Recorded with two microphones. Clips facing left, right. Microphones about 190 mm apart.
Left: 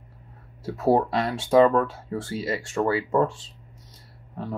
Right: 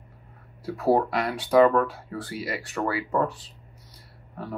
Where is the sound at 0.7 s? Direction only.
25° left (ahead or behind).